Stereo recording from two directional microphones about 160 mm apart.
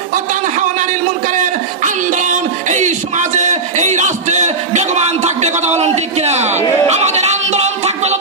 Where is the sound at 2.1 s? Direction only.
50° right (ahead or behind).